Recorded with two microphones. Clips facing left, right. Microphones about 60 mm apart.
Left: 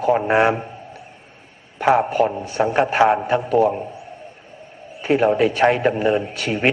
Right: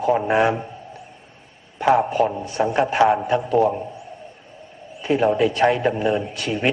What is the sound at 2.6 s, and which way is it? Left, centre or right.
Speech, left.